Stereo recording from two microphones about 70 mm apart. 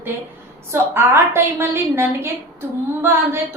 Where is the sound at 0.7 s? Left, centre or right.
Right.